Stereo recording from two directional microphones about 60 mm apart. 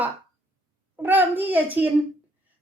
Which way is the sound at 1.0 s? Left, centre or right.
Right.